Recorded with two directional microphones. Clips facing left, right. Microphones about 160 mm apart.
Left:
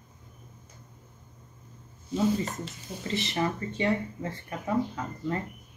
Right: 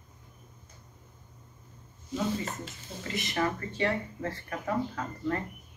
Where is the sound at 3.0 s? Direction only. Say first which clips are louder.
Left 1 dB; 25° left (ahead or behind).